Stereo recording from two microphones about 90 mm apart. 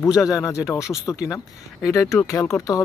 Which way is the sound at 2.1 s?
35° left (ahead or behind).